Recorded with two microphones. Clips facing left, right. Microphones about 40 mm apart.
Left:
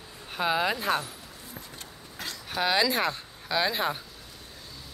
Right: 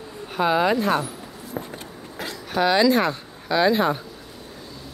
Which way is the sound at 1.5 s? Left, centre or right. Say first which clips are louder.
Right 14 dB; right.